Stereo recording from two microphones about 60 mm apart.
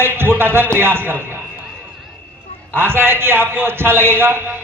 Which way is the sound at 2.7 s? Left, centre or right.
Right.